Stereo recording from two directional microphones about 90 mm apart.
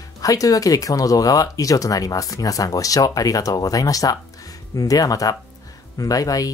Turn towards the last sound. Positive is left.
turn(degrees=40)  # may be behind; listen again after turning